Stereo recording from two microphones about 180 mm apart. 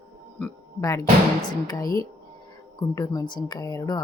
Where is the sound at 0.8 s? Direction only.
20° left (ahead or behind).